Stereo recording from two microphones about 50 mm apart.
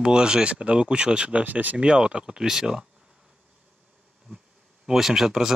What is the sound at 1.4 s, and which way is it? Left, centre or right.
Speech, right.